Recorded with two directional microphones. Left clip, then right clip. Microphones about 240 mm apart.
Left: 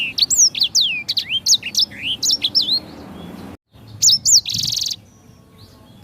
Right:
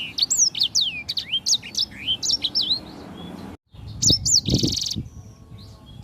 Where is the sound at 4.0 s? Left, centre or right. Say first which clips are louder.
Left 5 dB; centre.